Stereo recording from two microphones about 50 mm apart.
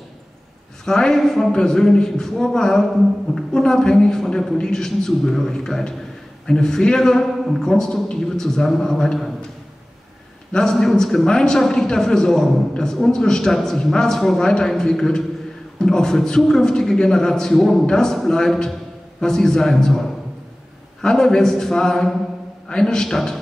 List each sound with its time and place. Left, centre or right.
0.8 s a man's voice: centre
10.5 s a man's voice: centre